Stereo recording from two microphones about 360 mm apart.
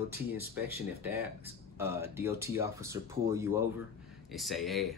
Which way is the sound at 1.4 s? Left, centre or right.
Centre.